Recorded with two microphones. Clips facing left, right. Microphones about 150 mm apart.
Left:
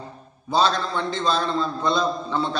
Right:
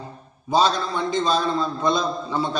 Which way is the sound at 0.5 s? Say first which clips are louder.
Right 1 dB; 15° right (ahead or behind).